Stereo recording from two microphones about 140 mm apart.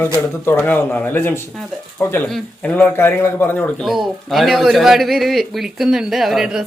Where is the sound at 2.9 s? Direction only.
15° left (ahead or behind).